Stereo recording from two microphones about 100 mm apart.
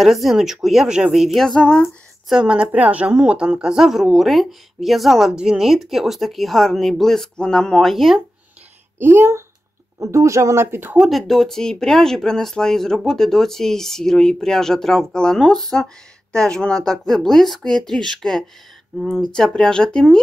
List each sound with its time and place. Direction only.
0.0 s speech: centre (ahead or behind)
2.2 s speech: 5° right (ahead or behind)
8.9 s speech: 25° right (ahead or behind)
11.0 s speech: centre (ahead or behind)